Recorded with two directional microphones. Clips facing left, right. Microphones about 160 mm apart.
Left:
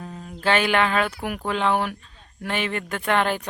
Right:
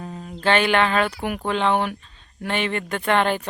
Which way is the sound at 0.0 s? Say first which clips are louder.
Right 2 dB; 5° right (ahead or behind).